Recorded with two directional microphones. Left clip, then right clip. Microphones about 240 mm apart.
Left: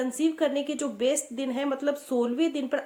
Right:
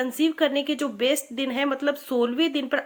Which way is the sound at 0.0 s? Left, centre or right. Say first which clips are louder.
Right 3 dB; right.